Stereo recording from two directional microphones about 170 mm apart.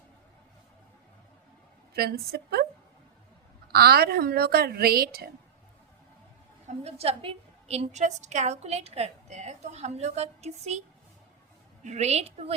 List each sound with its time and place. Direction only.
1.9 s a woman's voice: 65° right (ahead or behind)
3.7 s a woman's voice: 65° right (ahead or behind)
6.7 s a woman's voice: 40° right (ahead or behind)